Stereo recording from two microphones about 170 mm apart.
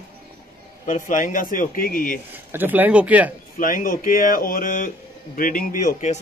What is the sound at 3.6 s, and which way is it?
A man's voice, 55° left (ahead or behind).